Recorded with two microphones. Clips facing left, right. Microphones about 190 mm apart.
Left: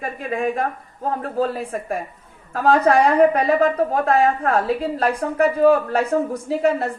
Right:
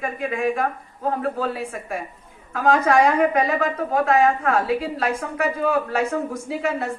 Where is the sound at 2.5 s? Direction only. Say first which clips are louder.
Left 2 dB; 35° left (ahead or behind).